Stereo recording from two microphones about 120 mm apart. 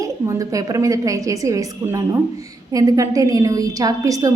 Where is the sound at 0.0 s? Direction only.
30° right (ahead or behind).